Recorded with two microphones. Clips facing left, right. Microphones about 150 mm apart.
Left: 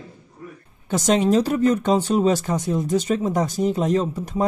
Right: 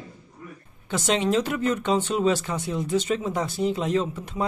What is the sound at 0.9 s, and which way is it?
Speech, 40° left (ahead or behind).